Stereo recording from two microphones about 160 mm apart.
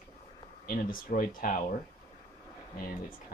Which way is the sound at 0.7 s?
60° left (ahead or behind).